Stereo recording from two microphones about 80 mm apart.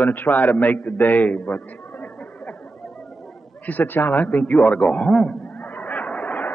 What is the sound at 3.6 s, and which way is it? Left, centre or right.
A man's voice, left.